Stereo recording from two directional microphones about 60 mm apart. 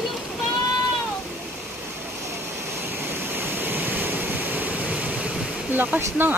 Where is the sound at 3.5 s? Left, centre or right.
Right.